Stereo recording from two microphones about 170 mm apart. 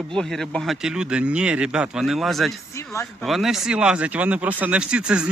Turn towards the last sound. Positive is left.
turn(degrees=-5)  # may be behind; listen again after turning